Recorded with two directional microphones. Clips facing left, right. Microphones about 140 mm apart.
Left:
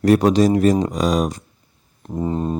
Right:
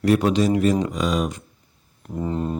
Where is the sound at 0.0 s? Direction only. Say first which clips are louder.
Left 4 dB; 40° left (ahead or behind).